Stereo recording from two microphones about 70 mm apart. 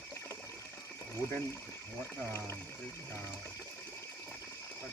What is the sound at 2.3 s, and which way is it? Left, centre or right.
Speech, left.